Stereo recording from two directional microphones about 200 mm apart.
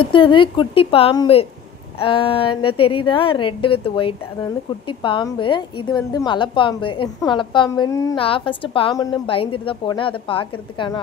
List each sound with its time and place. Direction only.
0.0 s a woman's voice: 25° left (ahead or behind)